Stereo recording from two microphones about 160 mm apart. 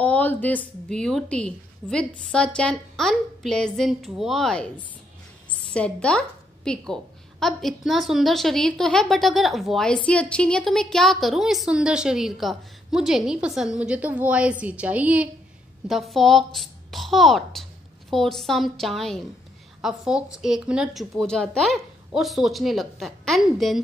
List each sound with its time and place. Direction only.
0.0 s a woman's voice: 10° left (ahead or behind)